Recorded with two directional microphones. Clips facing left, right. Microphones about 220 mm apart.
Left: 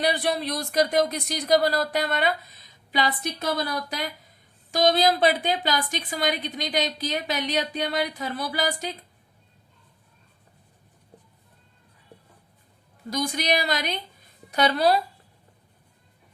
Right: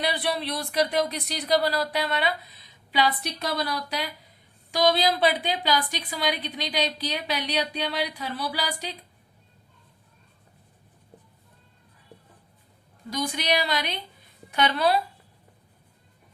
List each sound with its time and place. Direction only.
0.0 s a woman's voice: 45° left (ahead or behind)
13.1 s a woman's voice: 45° left (ahead or behind)